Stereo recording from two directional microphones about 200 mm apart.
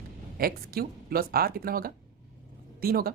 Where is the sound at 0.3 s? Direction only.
50° right (ahead or behind).